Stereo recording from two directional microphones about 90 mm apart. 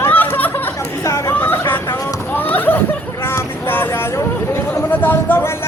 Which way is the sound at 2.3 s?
20° left (ahead or behind).